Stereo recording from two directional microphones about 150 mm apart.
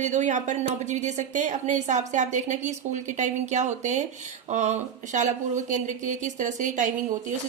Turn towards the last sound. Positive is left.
turn(degrees=-55)  # may be behind; listen again after turning